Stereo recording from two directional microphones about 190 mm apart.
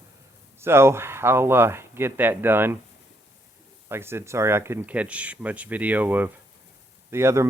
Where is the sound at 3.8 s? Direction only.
10° right (ahead or behind).